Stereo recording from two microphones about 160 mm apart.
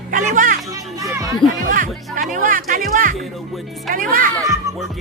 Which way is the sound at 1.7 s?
60° right (ahead or behind).